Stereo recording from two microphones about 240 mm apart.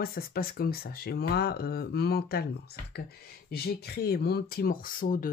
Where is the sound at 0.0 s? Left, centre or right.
Left.